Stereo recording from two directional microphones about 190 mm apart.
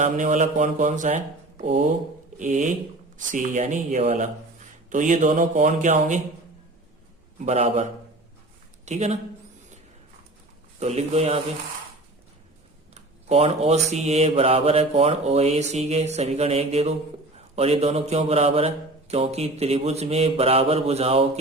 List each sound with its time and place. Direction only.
0.0 s speech: 40° right (ahead or behind)
2.4 s speech: 40° right (ahead or behind)
7.3 s speech: 35° right (ahead or behind)
10.8 s speech: 35° right (ahead or behind)
12.9 s speech: 35° right (ahead or behind)